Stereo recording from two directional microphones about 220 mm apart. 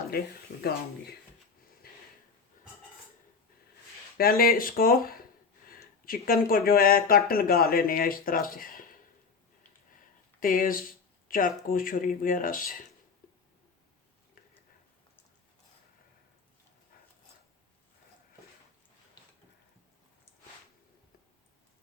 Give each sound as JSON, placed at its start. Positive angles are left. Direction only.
{"t": 0.1, "sound": "speech", "side_deg": 45}
{"t": 4.2, "sound": "speech", "side_deg": 45}
{"t": 10.4, "sound": "speech", "side_deg": 40}